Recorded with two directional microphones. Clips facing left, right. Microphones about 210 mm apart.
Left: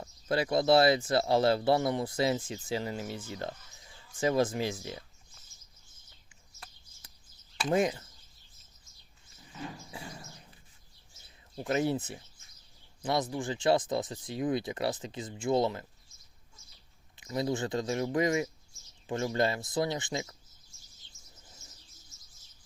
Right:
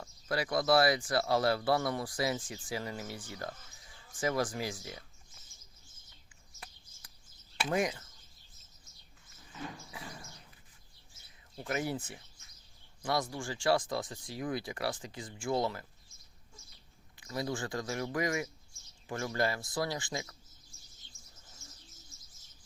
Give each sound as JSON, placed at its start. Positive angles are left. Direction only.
{"t": 0.0, "sound": "speech", "side_deg": 25}
{"t": 7.0, "sound": "a sound", "side_deg": 25}
{"t": 7.7, "sound": "speech", "side_deg": 25}
{"t": 9.9, "sound": "speech", "side_deg": 30}
{"t": 11.5, "sound": "speech", "side_deg": 25}
{"t": 17.2, "sound": "speech", "side_deg": 20}